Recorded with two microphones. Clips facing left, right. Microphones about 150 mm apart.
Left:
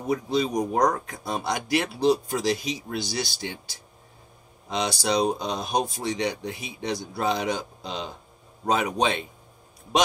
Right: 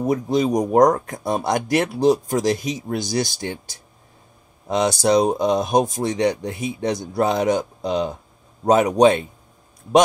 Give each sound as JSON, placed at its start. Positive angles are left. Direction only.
{"t": 0.0, "sound": "speech", "side_deg": -45}